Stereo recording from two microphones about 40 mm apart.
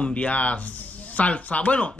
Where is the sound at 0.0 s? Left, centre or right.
Left.